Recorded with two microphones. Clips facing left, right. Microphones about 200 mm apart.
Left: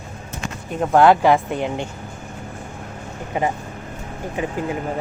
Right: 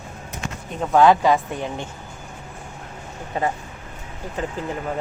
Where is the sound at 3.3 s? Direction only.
15° left (ahead or behind).